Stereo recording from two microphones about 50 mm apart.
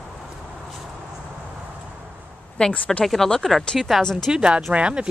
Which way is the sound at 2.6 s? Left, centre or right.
Left.